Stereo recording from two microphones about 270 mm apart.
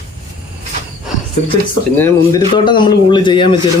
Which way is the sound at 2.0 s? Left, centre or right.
Centre.